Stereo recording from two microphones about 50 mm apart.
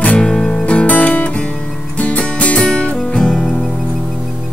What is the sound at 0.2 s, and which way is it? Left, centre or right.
Music, centre.